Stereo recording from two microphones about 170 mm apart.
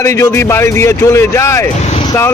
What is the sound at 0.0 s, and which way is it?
A man's voice, 15° left (ahead or behind).